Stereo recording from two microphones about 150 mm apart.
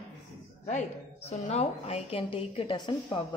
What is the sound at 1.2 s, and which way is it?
A woman's voice, 45° left (ahead or behind).